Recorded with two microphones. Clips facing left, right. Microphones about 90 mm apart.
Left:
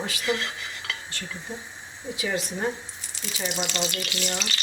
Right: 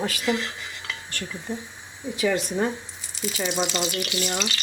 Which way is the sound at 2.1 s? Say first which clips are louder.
Right 6 dB; 60° right (ahead or behind).